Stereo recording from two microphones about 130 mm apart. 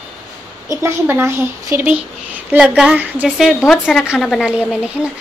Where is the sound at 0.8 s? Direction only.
15° right (ahead or behind).